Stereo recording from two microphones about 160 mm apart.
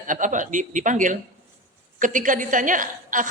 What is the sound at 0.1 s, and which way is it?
A woman's voice, 55° right (ahead or behind).